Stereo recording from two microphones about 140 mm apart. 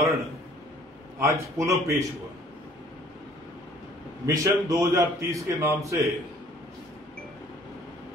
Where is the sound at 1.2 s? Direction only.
20° right (ahead or behind).